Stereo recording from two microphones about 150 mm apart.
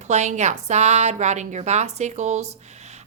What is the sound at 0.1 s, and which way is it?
Speech, 50° right (ahead or behind).